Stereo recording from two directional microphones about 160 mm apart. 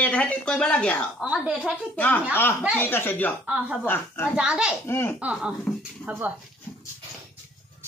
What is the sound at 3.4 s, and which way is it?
Speech, 5° right (ahead or behind).